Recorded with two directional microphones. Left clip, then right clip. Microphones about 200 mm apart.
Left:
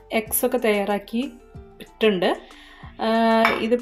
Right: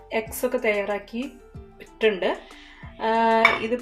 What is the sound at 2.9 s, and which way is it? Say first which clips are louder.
Speech: left 1 dB; 45° left (ahead or behind).